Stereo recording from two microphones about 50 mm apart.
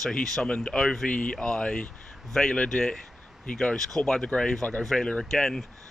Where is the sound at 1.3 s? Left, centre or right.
Centre.